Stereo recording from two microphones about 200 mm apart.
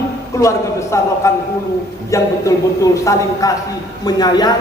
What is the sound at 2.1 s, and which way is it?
A woman's voice, 15° left (ahead or behind).